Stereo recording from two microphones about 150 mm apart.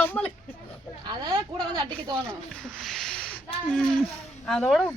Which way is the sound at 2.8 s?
Centre (ahead or behind).